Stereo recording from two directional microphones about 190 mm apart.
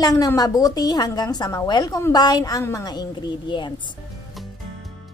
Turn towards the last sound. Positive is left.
turn(degrees=25)  # may be behind; listen again after turning